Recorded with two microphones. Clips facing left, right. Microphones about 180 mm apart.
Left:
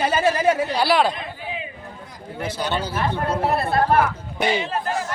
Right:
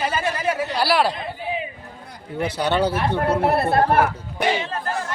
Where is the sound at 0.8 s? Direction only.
5° right (ahead or behind).